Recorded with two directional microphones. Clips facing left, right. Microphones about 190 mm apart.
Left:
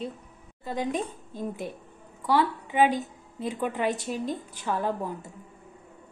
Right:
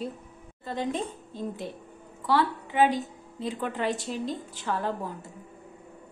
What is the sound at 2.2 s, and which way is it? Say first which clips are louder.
A woman's voice: left 1 dB; 15° left (ahead or behind).